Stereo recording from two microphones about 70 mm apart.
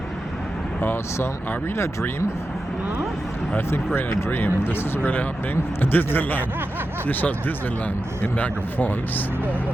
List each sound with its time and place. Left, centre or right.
0.8 s speech: left
3.9 s speech: left